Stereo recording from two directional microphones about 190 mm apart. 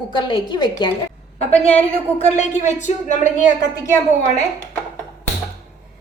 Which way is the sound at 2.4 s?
40° left (ahead or behind).